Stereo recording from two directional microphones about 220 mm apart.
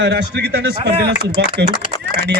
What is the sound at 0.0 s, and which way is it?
Speech, 55° right (ahead or behind).